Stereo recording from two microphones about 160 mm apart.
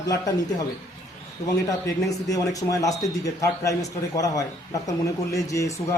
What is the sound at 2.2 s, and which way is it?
A man's voice, 20° left (ahead or behind).